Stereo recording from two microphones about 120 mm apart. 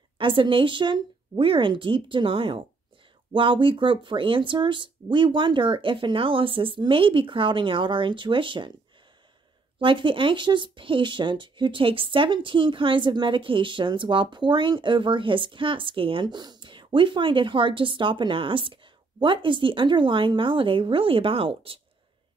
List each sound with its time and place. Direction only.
0.2 s speech: 45° right (ahead or behind)
9.8 s speech: 45° right (ahead or behind)